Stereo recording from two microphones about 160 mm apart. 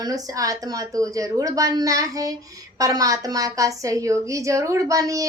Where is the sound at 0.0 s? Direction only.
20° right (ahead or behind).